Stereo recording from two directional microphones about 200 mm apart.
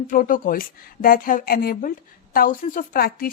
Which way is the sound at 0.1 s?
40° left (ahead or behind).